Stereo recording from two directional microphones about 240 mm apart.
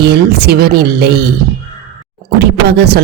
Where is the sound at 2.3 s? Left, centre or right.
Right.